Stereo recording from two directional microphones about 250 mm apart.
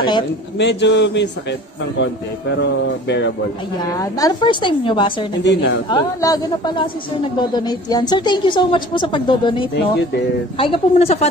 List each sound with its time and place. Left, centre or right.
0.6 s speech: left
2.5 s speech: left
3.9 s a woman's voice: centre
5.4 s speech: left
5.9 s a woman's voice: centre
9.8 s speech: left
10.6 s a woman's voice: left